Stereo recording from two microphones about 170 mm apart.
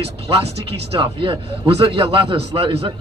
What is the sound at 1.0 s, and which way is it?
Speech, 30° right (ahead or behind).